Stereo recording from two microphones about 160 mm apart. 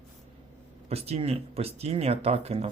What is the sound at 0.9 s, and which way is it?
Speech, 40° right (ahead or behind).